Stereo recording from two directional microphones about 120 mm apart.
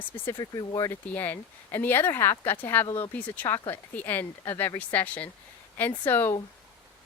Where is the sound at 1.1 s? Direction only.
15° left (ahead or behind).